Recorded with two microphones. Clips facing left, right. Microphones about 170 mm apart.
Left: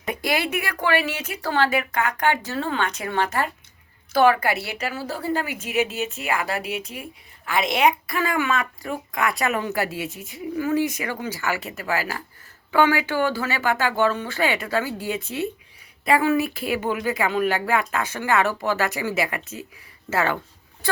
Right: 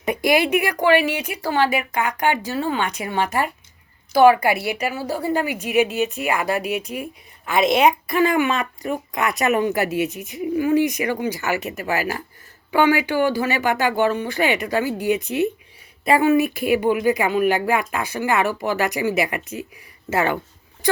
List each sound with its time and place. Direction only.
0.0 s a woman's voice: 15° right (ahead or behind)